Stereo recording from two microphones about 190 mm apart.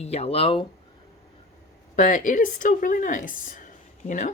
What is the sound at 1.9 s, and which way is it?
Speech, 40° left (ahead or behind).